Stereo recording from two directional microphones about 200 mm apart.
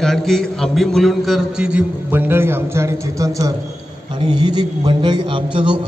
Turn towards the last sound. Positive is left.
turn(degrees=-25)  # may be behind; listen again after turning